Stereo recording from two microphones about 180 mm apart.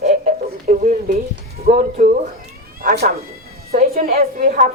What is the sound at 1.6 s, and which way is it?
Speech, 50° right (ahead or behind).